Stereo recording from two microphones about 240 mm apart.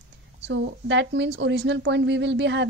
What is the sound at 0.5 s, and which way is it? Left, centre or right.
A woman's voice, right.